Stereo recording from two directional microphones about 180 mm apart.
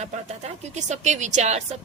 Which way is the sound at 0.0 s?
40° right (ahead or behind).